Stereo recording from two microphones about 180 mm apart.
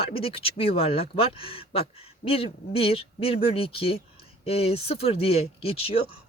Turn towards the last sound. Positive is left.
turn(degrees=30)  # may be behind; listen again after turning